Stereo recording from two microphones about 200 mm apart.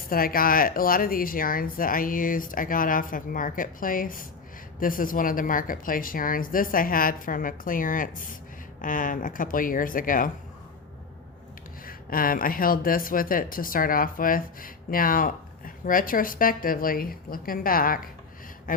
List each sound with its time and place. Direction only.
0.1 s speech: 45° left (ahead or behind)
11.9 s speech: 45° left (ahead or behind)
18.7 s a sound: 40° left (ahead or behind)